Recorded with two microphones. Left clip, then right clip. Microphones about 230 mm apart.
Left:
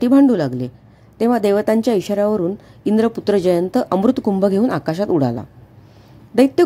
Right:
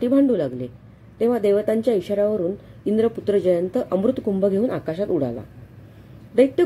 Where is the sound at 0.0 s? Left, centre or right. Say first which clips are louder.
Left 5 dB; left.